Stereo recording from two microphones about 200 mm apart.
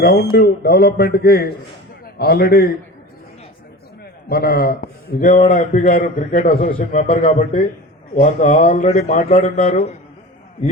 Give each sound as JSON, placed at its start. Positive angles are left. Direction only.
{"t": 0.0, "sound": "a man's voice", "side_deg": 50}
{"t": 4.3, "sound": "a man's voice", "side_deg": 50}
{"t": 7.1, "sound": "a man's voice", "side_deg": 30}